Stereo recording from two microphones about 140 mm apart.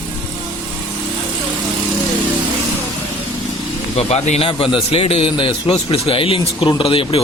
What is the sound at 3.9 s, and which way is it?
A man's voice, 50° left (ahead or behind).